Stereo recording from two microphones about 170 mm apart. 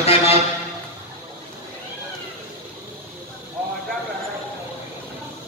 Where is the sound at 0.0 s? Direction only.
35° left (ahead or behind).